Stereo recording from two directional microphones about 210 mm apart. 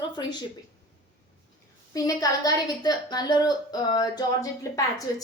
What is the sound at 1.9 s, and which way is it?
A woman's voice, 15° left (ahead or behind).